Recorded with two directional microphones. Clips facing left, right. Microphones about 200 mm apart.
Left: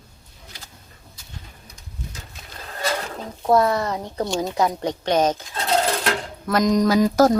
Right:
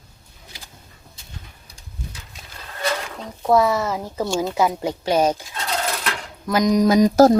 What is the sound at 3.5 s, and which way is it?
Speech, centre (ahead or behind).